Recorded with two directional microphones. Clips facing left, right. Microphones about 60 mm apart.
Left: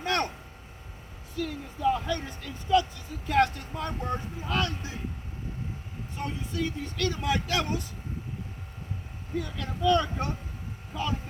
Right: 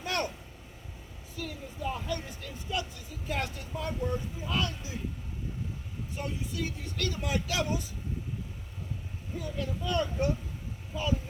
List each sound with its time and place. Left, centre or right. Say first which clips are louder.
0.0 s vehicle: left 4 dB; left
1.4 s speech: left 7 dB; left
6.1 s speech: left 3 dB; left
9.4 s speech: left 6 dB; left